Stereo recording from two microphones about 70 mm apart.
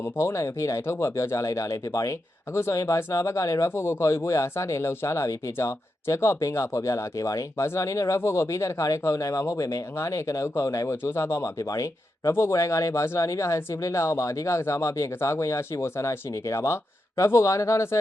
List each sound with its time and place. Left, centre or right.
0.0 s speech: left
2.5 s speech: left
12.3 s speech: left